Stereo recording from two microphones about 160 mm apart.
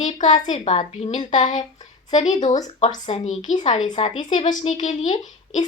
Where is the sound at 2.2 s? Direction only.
50° left (ahead or behind).